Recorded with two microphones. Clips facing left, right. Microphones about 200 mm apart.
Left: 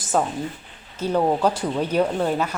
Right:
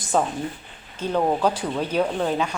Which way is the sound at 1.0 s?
10° left (ahead or behind).